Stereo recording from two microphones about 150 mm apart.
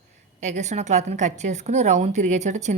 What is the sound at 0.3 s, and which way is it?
A woman's voice, 50° right (ahead or behind).